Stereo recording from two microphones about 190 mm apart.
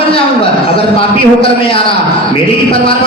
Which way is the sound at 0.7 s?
30° left (ahead or behind).